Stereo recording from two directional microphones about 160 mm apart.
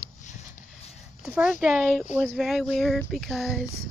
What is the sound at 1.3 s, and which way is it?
Speech, 5° right (ahead or behind).